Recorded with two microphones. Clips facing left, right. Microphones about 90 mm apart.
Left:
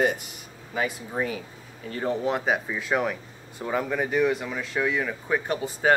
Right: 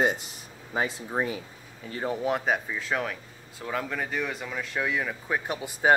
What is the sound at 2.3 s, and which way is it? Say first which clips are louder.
Speech: left 2 dB; 5° left (ahead or behind).